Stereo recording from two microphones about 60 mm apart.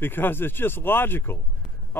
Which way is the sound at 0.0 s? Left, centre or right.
Left.